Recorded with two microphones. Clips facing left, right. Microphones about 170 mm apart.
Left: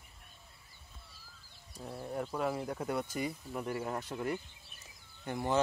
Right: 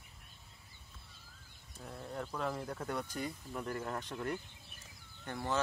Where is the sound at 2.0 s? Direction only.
10° left (ahead or behind).